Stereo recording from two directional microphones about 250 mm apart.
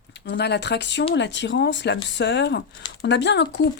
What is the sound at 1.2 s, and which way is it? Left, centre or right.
Speech, left.